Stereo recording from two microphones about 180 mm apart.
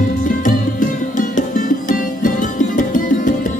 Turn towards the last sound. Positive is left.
turn(degrees=45)  # may be behind; listen again after turning